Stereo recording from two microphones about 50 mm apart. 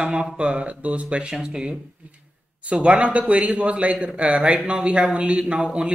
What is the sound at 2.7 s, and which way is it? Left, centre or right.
Speech, right.